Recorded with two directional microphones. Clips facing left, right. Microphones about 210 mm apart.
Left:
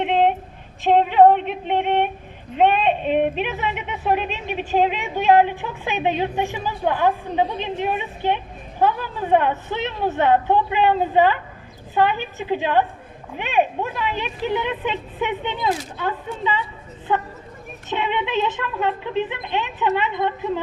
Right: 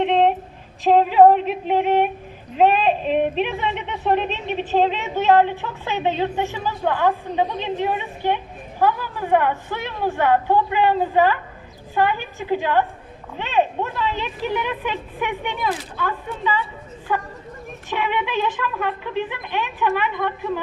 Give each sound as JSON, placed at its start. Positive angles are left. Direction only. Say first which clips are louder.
{"t": 0.0, "sound": "a sound", "louder": "right 1 dB", "side_deg": 5}
{"t": 0.8, "sound": "female singing", "louder": "right 1 dB", "side_deg": 0}
{"t": 2.6, "sound": "speech", "louder": "right 1 dB", "side_deg": 0}